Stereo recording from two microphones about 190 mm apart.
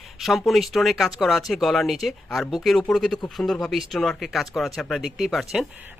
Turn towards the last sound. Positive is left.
turn(degrees=0)  # may be behind; listen again after turning